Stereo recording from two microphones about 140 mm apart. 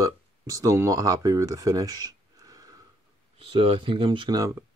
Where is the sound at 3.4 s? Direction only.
40° right (ahead or behind).